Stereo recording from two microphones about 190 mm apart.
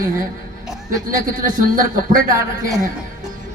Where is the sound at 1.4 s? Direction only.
45° right (ahead or behind).